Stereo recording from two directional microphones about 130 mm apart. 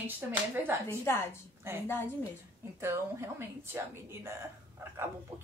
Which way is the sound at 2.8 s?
20° right (ahead or behind).